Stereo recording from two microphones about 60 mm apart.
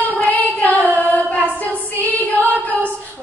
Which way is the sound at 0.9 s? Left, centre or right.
Left.